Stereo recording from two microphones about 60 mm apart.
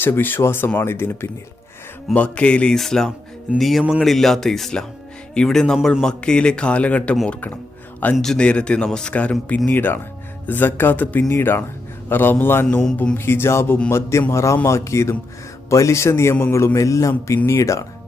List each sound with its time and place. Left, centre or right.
0.0 s speech: left
2.1 s speech: left
2.7 s a man's voice: centre; by 7.6 s left
8.2 s a man's voice: centre
9.6 s a man's voice: left
16.7 s speech: left